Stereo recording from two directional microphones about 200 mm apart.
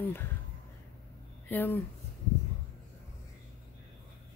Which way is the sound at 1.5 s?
10° left (ahead or behind).